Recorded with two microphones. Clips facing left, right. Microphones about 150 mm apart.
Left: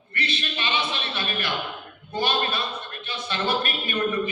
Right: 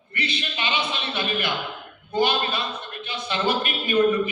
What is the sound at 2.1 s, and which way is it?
A man's voice, 15° right (ahead or behind).